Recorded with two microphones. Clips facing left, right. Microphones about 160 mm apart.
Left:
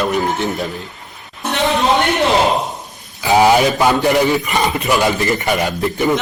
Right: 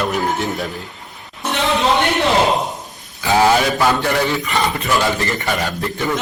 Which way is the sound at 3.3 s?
15° left (ahead or behind).